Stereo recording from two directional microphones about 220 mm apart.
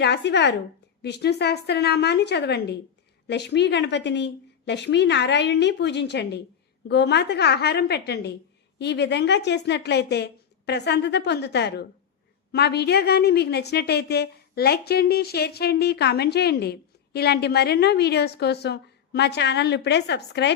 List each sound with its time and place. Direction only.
0.0 s a woman's voice: 50° left (ahead or behind)